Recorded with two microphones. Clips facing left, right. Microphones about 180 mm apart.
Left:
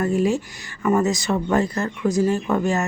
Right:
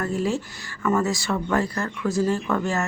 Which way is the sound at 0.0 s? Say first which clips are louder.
Left 5 dB; 15° left (ahead or behind).